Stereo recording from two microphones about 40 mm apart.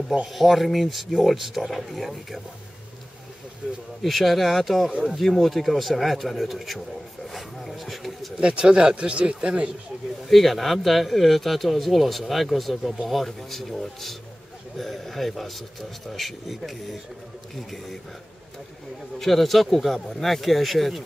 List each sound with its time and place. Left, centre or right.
0.3 s speech: centre
4.0 s speech: centre
7.2 s a sound: centre
8.4 s speech: right
10.2 s speech: centre
19.1 s speech: centre